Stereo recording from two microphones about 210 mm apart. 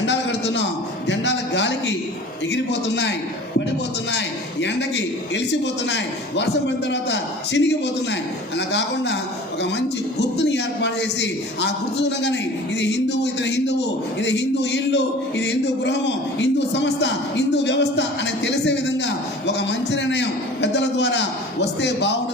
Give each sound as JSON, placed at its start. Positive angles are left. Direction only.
{"t": 0.0, "sound": "a sound", "side_deg": 55}
{"t": 2.5, "sound": "a man's voice", "side_deg": 55}
{"t": 5.3, "sound": "speech", "side_deg": 55}
{"t": 10.2, "sound": "a man's voice", "side_deg": 55}